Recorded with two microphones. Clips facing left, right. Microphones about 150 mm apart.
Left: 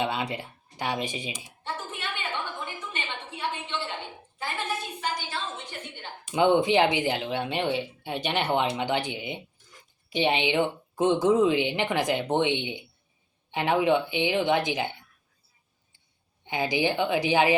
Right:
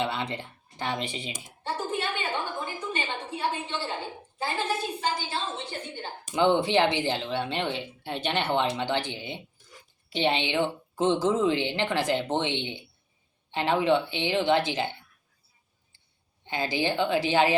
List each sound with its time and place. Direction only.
0.0 s speech: 15° left (ahead or behind)
1.5 s a sound: 35° right (ahead or behind)
6.3 s speech: 15° left (ahead or behind)
16.4 s speech: 15° left (ahead or behind)